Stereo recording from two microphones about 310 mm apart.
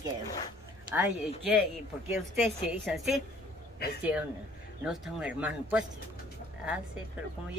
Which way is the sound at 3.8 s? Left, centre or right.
Left.